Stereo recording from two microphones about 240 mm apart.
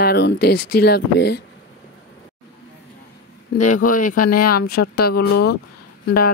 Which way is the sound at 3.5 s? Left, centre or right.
Left.